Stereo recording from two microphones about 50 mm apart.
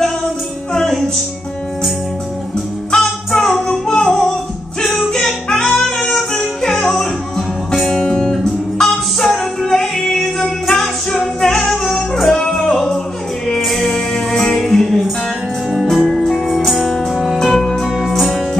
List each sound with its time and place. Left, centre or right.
0.7 s music: centre
3.0 s music: centre
17.9 s music: centre